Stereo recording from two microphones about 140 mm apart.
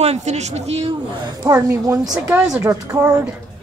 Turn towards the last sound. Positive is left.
turn(degrees=-20)  # may be behind; listen again after turning